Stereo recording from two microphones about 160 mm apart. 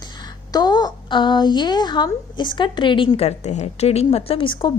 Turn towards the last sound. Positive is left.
turn(degrees=30)  # may be behind; listen again after turning